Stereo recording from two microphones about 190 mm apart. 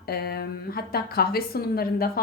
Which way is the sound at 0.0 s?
55° left (ahead or behind).